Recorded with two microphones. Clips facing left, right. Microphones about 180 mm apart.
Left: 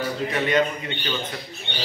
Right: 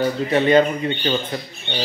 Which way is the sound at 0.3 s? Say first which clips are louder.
Right 7 dB; 30° right (ahead or behind).